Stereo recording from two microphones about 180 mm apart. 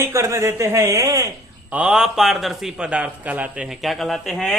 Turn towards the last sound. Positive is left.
turn(degrees=0)  # may be behind; listen again after turning